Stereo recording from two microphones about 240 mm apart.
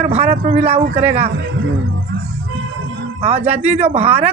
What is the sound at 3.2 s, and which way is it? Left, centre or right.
Speech, right.